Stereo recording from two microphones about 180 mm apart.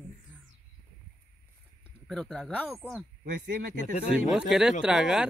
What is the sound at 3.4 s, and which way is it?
Speech, 50° right (ahead or behind).